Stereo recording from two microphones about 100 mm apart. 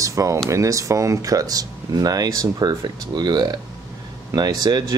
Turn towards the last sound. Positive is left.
turn(degrees=-40)  # may be behind; listen again after turning